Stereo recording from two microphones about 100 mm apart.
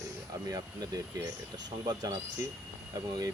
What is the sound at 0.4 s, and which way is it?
Speech, 35° right (ahead or behind).